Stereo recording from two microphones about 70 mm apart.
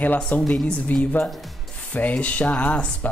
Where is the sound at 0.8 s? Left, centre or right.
Left.